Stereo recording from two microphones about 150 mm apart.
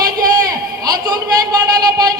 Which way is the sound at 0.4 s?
25° right (ahead or behind).